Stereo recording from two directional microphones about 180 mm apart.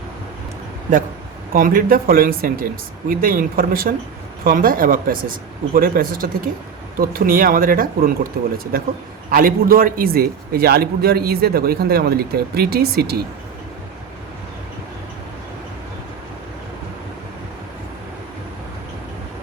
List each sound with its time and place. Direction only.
1.5 s a man's voice: 50° right (ahead or behind)